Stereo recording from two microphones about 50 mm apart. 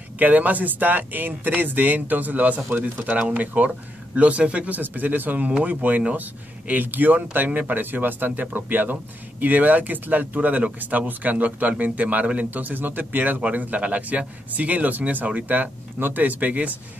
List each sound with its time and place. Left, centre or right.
0.2 s speech: right